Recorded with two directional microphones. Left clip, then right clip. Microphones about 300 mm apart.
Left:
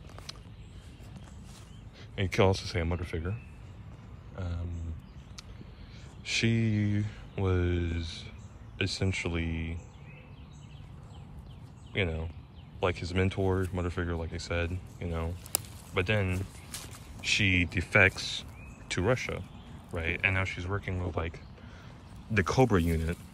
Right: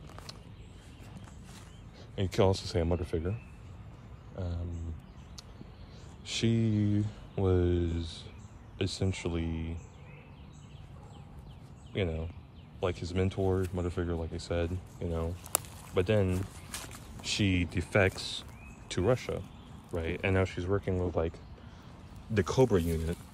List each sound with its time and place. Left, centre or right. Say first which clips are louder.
2.1 s speech: left 1 dB; centre
4.4 s a sound: right 1 dB; centre
6.2 s speech: left 2 dB; centre
11.9 s speech: left 2 dB; centre